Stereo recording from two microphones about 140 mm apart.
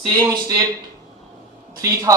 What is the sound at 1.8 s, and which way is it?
Speech, 25° right (ahead or behind).